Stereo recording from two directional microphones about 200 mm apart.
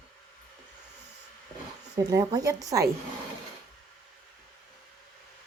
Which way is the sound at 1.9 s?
20° right (ahead or behind).